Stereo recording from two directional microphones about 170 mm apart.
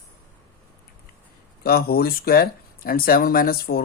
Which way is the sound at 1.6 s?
65° left (ahead or behind).